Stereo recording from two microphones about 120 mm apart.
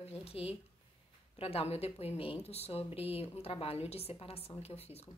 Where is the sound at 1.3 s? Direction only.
55° left (ahead or behind).